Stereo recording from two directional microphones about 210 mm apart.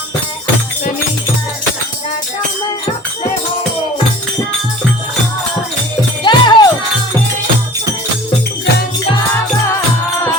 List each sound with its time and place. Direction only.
6.2 s music: 20° left (ahead or behind)